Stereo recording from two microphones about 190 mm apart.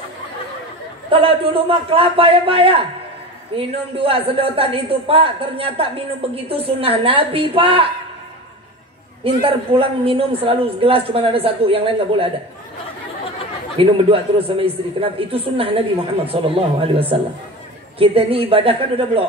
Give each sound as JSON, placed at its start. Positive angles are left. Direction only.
{"t": 1.1, "sound": "a woman's voice", "side_deg": -30}
{"t": 9.2, "sound": "a woman's voice", "side_deg": -30}
{"t": 13.7, "sound": "a woman's voice", "side_deg": -30}